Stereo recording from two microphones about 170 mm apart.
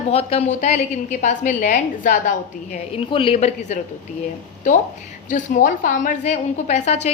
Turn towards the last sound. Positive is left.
turn(degrees=40)  # may be behind; listen again after turning